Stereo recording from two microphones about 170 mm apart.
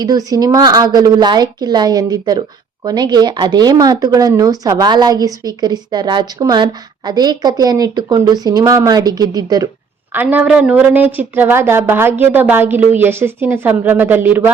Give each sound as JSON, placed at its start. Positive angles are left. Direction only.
{"t": 0.0, "sound": "speech", "side_deg": -20}
{"t": 10.1, "sound": "a woman's voice", "side_deg": -10}